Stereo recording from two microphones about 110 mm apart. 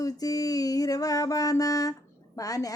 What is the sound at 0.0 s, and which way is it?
Music, 35° left (ahead or behind).